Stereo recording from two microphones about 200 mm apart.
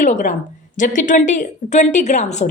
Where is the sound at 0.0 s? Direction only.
40° left (ahead or behind).